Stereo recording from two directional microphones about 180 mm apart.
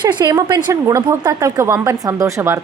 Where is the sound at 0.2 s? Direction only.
25° right (ahead or behind).